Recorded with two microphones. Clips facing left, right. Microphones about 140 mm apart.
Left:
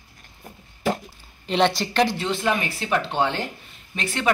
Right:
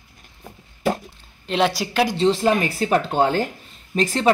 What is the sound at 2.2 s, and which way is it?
Speech, 35° right (ahead or behind).